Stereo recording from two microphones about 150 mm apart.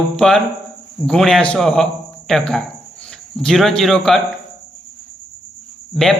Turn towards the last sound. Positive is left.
turn(degrees=0)  # may be behind; listen again after turning